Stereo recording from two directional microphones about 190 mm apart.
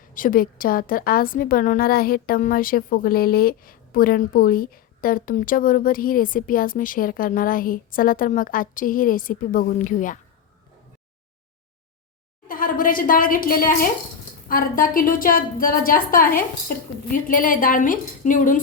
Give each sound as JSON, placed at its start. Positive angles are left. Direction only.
{"t": 0.1, "sound": "a woman's voice", "side_deg": 45}
{"t": 12.5, "sound": "a woman's voice", "side_deg": 45}